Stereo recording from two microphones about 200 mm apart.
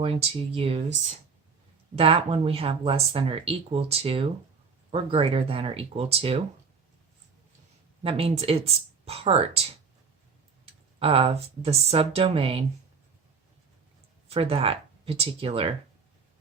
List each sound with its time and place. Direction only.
0.0 s speech: 30° right (ahead or behind)
2.0 s speech: 30° right (ahead or behind)
8.0 s speech: 30° right (ahead or behind)
11.0 s speech: 30° right (ahead or behind)
14.3 s speech: 30° right (ahead or behind)